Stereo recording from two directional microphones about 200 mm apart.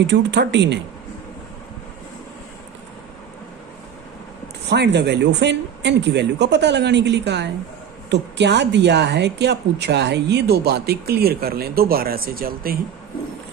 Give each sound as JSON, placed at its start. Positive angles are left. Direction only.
{"t": 0.1, "sound": "speech", "side_deg": -60}
{"t": 4.7, "sound": "speech", "side_deg": -60}